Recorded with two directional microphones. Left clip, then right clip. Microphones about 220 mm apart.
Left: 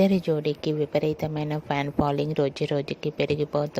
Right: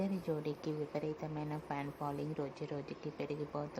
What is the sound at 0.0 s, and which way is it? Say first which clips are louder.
Speech: left 16 dB; 35° left (ahead or behind).